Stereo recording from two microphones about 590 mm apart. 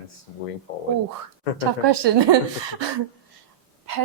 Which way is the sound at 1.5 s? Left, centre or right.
Right.